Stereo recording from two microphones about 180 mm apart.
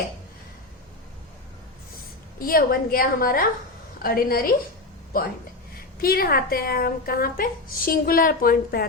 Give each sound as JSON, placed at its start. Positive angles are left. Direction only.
{"t": 2.4, "sound": "a woman's voice", "side_deg": 55}
{"t": 6.0, "sound": "a woman's voice", "side_deg": 55}